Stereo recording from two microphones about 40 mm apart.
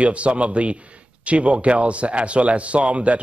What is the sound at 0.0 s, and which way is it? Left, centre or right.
Speech, right.